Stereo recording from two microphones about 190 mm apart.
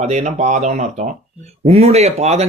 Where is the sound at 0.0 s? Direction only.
35° right (ahead or behind).